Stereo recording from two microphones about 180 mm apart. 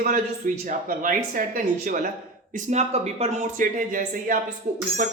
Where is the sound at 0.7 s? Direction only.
50° right (ahead or behind).